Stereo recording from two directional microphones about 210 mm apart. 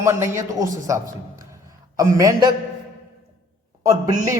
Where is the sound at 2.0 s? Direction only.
15° right (ahead or behind).